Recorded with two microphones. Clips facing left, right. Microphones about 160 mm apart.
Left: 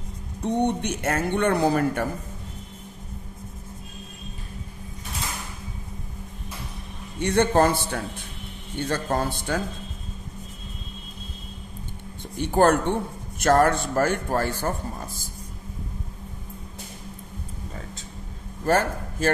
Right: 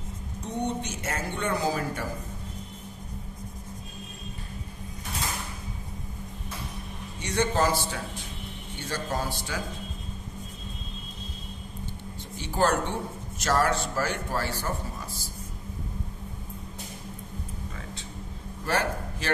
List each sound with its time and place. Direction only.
0.4 s speech: 60° left (ahead or behind)
7.2 s speech: 55° left (ahead or behind)
12.4 s speech: 55° left (ahead or behind)
18.7 s a man's voice: 45° left (ahead or behind)